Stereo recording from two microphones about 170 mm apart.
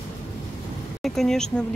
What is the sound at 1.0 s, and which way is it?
Speech, centre (ahead or behind).